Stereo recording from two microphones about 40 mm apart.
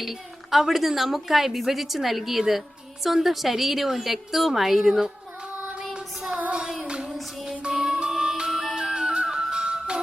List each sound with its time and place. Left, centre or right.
0.0 s a woman's voice: centre
5.8 s female singing: centre
6.8 s child singing: right
7.7 s music: centre